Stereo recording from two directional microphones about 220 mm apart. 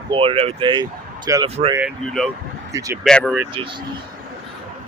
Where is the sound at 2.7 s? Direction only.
15° right (ahead or behind).